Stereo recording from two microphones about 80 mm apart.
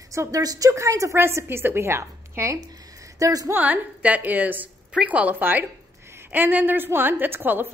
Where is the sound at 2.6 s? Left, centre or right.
Right.